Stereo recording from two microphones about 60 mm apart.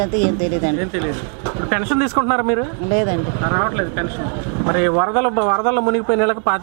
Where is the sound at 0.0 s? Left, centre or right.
Right.